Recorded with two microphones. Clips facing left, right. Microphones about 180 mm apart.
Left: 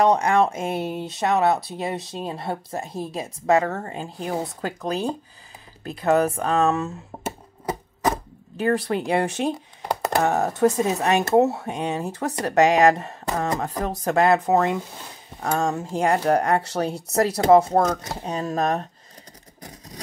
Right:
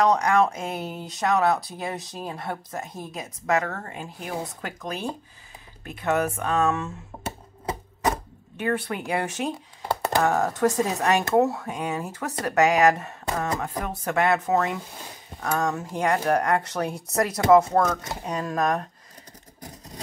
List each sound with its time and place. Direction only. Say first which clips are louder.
0.0 s speech: left 2 dB; 25° left (ahead or behind)
8.5 s speech: left 5 dB; 35° left (ahead or behind)